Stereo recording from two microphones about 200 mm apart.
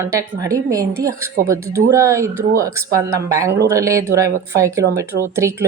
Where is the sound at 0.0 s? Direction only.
15° right (ahead or behind).